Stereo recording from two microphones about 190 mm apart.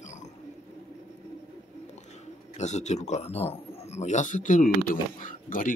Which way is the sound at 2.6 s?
35° left (ahead or behind).